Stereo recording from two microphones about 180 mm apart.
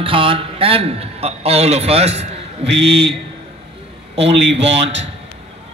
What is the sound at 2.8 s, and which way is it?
Speech, 65° right (ahead or behind).